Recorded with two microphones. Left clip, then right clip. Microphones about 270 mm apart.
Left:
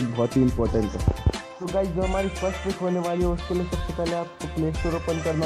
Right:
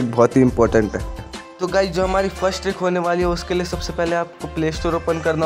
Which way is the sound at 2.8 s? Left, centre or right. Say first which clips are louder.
Right 7 dB; right.